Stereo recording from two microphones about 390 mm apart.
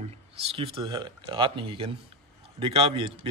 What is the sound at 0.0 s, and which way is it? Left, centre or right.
Speech, centre.